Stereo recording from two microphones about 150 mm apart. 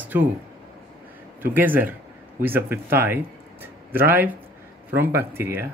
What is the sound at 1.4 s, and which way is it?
Speech, 10° right (ahead or behind).